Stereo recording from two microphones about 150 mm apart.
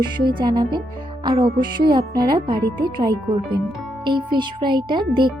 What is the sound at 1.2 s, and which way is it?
Music, 30° right (ahead or behind).